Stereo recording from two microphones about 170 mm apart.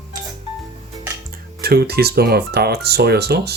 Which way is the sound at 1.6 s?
65° right (ahead or behind).